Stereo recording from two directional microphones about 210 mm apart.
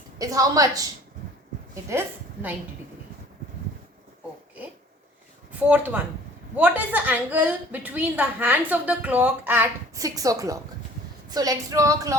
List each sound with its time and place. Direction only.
0.2 s a woman's voice: 15° right (ahead or behind)
5.5 s a woman's voice: 5° right (ahead or behind)